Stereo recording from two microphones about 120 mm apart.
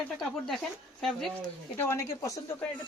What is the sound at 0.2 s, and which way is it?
Speech, centre (ahead or behind).